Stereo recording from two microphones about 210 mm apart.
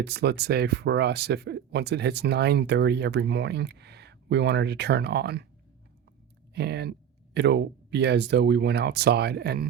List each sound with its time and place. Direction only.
0.0 s speech: 50° right (ahead or behind)
6.5 s speech: 50° right (ahead or behind)